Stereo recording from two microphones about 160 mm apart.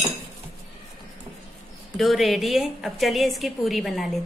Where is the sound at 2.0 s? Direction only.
Centre (ahead or behind).